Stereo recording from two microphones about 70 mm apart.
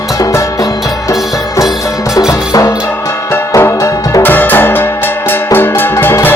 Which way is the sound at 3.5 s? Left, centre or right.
Left.